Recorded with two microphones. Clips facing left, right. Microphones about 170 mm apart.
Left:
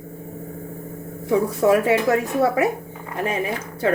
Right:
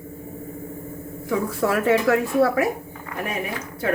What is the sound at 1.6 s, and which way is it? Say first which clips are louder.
Speech: left 1 dB; 15° left (ahead or behind).